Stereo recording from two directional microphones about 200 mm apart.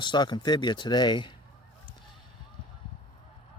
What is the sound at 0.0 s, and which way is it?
Speech, 20° left (ahead or behind).